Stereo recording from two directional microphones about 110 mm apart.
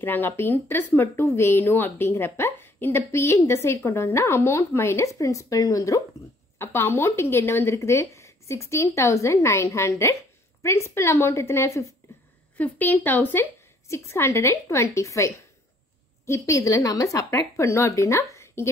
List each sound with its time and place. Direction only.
0.0 s speech: 20° left (ahead or behind)
12.0 s a sound: 20° left (ahead or behind)
12.5 s speech: 15° left (ahead or behind)